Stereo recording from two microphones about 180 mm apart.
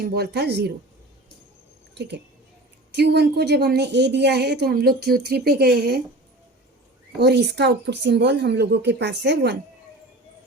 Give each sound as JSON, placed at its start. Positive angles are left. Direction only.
{"t": 0.0, "sound": "a woman's voice", "side_deg": -60}
{"t": 2.0, "sound": "a woman's voice", "side_deg": -70}
{"t": 7.2, "sound": "speech", "side_deg": -70}